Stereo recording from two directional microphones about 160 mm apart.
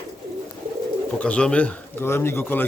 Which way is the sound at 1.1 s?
5° left (ahead or behind).